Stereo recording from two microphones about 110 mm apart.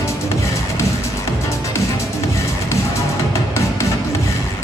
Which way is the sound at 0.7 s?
25° left (ahead or behind).